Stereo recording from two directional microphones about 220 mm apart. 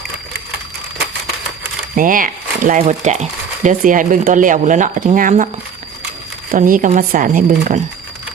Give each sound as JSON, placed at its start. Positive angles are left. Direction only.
{"t": 2.0, "sound": "speech", "side_deg": -40}
{"t": 6.5, "sound": "speech", "side_deg": -40}